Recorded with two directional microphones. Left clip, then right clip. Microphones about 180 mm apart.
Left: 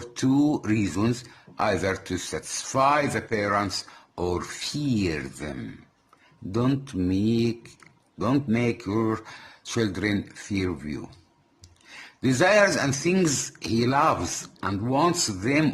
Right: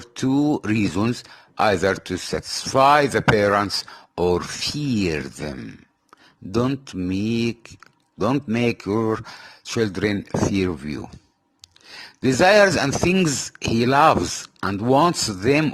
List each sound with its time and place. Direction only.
0.0 s speech: 35° right (ahead or behind)
6.7 s speech: 30° right (ahead or behind)
11.6 s a sound: 40° right (ahead or behind)
13.2 s speech: 35° right (ahead or behind)